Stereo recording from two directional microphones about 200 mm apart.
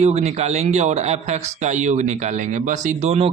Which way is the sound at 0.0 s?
35° right (ahead or behind).